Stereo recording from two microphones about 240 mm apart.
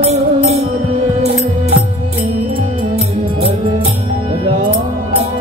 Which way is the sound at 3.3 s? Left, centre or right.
Right.